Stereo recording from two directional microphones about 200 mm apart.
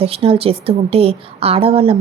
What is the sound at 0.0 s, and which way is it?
A woman's voice, 30° right (ahead or behind).